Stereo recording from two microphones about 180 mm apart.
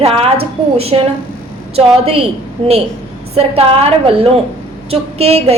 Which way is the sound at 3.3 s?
35° right (ahead or behind).